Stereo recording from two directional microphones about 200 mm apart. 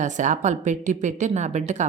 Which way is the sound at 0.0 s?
40° right (ahead or behind).